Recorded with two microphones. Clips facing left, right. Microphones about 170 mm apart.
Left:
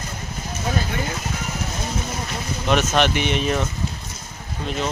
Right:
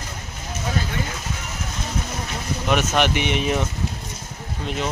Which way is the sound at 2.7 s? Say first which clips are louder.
Left 1 dB; 10° right (ahead or behind).